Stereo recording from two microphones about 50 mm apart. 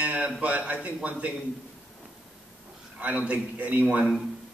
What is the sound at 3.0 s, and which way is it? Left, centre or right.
A man's voice, right.